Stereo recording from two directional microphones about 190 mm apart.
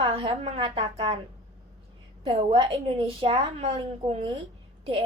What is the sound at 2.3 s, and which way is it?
A woman's voice, 25° right (ahead or behind).